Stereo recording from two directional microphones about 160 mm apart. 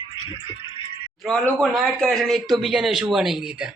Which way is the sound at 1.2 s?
5° left (ahead or behind).